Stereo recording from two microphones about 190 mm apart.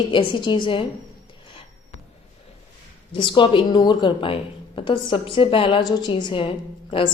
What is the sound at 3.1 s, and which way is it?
A woman's voice, 25° left (ahead or behind).